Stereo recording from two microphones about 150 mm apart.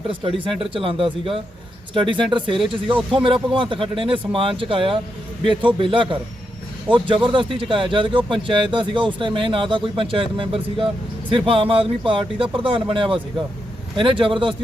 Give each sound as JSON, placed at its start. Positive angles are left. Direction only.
{"t": 0.1, "sound": "speech", "side_deg": -35}